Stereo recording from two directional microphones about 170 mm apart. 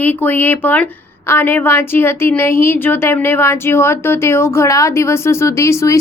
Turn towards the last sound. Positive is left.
turn(degrees=15)  # may be behind; listen again after turning